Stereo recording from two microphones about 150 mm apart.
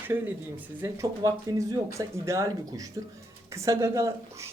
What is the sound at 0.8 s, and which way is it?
Speech, 20° right (ahead or behind).